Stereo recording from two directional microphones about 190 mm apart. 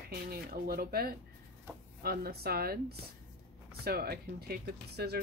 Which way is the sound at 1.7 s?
15° right (ahead or behind).